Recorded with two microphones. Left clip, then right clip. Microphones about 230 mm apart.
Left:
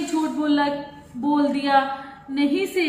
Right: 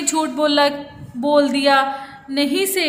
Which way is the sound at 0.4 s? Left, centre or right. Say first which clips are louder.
Right 9 dB; right.